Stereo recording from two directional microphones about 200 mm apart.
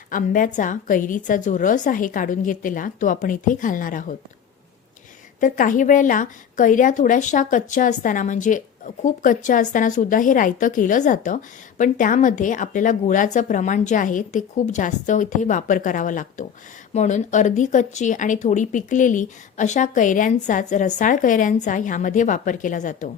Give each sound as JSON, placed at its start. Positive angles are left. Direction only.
{"t": 0.1, "sound": "speech", "side_deg": 40}
{"t": 5.4, "sound": "speech", "side_deg": 40}